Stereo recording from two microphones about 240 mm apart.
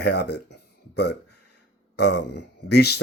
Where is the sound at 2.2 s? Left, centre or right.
Left.